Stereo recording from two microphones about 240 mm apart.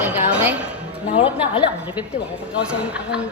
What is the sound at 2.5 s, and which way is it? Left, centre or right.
Speech, centre.